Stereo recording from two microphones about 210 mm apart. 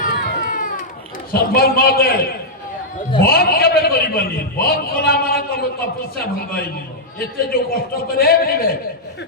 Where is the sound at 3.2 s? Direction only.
45° left (ahead or behind).